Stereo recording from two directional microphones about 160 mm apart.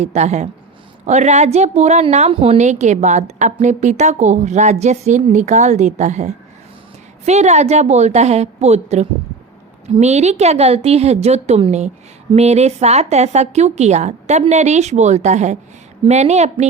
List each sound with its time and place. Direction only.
0.0 s a woman's voice: 45° right (ahead or behind)